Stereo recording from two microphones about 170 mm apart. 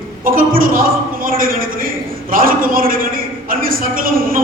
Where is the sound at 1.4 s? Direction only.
55° right (ahead or behind).